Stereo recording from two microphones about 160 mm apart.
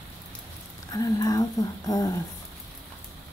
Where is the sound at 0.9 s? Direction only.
20° left (ahead or behind).